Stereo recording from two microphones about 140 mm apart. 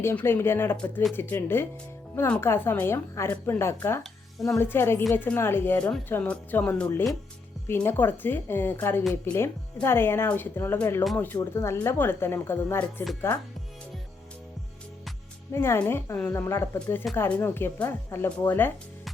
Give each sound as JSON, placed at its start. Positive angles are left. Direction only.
{"t": 0.0, "sound": "a woman's voice", "side_deg": 15}
{"t": 15.5, "sound": "a woman's voice", "side_deg": 15}